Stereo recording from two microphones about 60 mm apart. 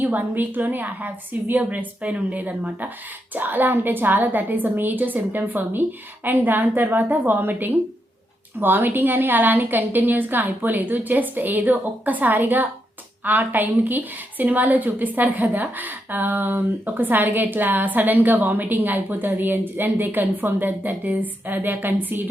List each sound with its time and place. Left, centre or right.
0.0 s a woman's voice: right